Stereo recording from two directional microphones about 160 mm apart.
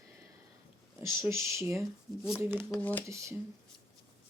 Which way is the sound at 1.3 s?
15° right (ahead or behind).